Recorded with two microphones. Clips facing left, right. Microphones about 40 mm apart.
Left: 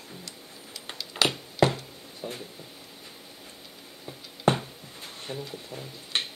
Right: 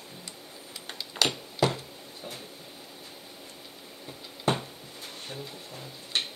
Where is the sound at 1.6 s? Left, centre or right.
Left.